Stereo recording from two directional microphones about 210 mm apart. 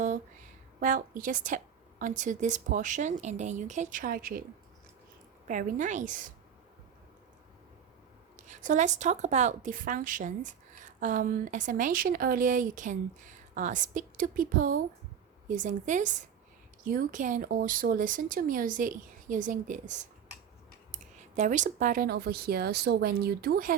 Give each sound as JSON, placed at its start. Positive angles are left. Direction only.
{"t": 0.8, "sound": "speech", "side_deg": -40}
{"t": 5.5, "sound": "speech", "side_deg": -35}
{"t": 8.4, "sound": "speech", "side_deg": -35}